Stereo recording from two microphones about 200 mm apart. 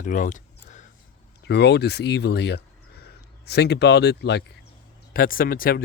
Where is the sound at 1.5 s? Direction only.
60° left (ahead or behind).